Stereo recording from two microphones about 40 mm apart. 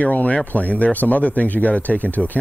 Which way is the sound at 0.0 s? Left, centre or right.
Left.